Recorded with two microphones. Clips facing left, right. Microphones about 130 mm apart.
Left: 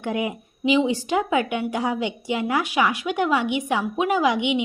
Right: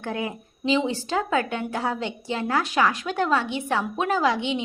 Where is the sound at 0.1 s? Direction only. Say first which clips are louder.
Left 4 dB; 15° left (ahead or behind).